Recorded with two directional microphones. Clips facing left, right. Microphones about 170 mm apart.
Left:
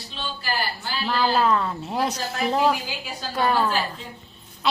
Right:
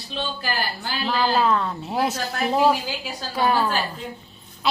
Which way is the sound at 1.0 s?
Centre (ahead or behind).